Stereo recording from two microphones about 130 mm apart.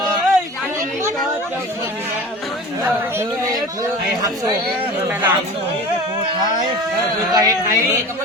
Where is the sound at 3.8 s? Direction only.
30° right (ahead or behind).